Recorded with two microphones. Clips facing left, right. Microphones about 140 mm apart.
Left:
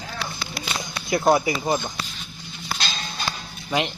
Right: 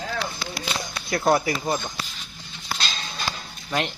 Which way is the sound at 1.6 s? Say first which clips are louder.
Left 2 dB; 20° left (ahead or behind).